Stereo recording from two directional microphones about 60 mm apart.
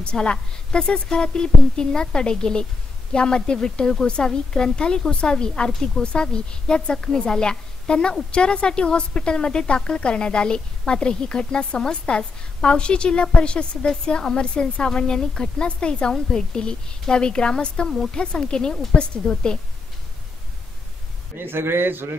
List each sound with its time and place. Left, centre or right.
0.0 s a woman's voice: centre
21.4 s a man's voice: right